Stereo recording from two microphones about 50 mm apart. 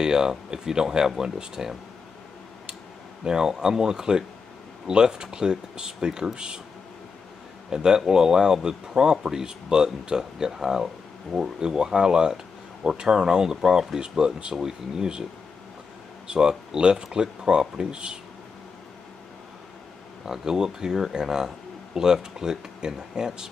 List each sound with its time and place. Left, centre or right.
0.0 s speech: centre
3.3 s speech: centre
7.7 s speech: centre
16.3 s speech: centre
20.2 s speech: centre